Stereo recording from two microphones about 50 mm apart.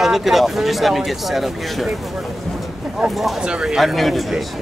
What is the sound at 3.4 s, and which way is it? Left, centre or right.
Speech, centre.